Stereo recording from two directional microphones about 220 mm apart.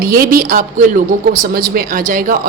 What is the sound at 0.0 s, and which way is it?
Speech, 40° right (ahead or behind).